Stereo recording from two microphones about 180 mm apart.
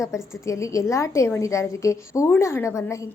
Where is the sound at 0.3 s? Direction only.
15° left (ahead or behind).